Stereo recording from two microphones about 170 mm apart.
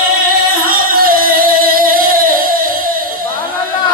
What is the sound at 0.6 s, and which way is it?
Music, 60° right (ahead or behind).